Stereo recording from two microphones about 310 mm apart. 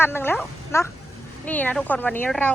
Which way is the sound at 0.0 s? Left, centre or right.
Centre.